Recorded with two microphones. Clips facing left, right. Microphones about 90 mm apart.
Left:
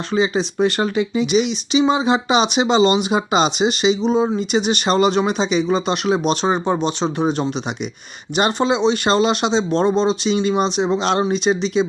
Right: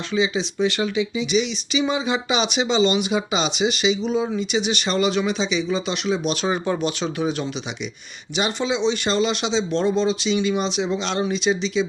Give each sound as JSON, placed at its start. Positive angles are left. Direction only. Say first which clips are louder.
{"t": 0.1, "sound": "speech", "louder": "left 4 dB", "side_deg": 45}
{"t": 8.4, "sound": "speech", "louder": "left 5 dB", "side_deg": 45}